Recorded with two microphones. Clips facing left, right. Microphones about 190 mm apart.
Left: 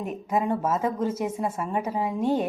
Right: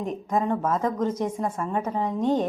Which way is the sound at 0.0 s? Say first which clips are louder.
Right 1 dB; 5° left (ahead or behind).